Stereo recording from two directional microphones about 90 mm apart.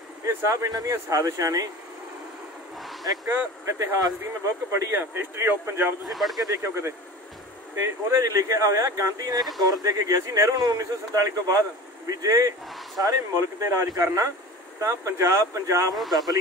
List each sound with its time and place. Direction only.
0.2 s speech: 35° right (ahead or behind)
2.8 s speech: centre (ahead or behind)
3.3 s speech: 35° right (ahead or behind)
6.0 s speech: centre (ahead or behind)
6.4 s speech: 35° right (ahead or behind)
16.0 s speech: centre (ahead or behind)